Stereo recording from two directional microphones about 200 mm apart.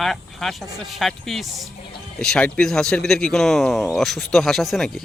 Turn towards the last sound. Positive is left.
turn(degrees=0)  # may be behind; listen again after turning